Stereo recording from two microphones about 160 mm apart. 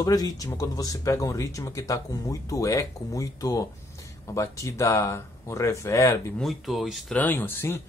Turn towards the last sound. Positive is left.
turn(degrees=15)  # may be behind; listen again after turning